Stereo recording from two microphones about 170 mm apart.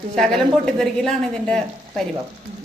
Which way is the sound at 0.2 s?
Centre (ahead or behind).